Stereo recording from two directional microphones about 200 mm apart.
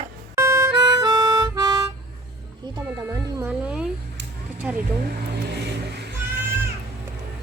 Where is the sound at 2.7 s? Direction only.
15° right (ahead or behind).